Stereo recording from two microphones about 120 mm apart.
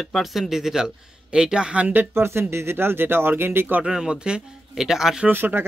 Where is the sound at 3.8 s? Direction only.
5° right (ahead or behind).